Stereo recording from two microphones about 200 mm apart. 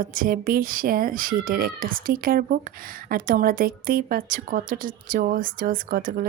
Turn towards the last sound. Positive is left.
turn(degrees=-45)  # may be behind; listen again after turning